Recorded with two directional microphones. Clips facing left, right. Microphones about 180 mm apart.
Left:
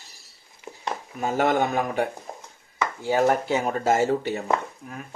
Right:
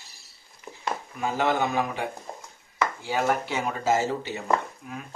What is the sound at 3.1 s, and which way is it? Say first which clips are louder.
Speech: left 5 dB; 40° left (ahead or behind).